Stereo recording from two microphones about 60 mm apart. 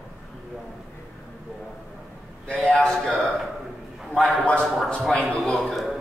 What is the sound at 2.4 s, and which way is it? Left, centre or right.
Speech, centre.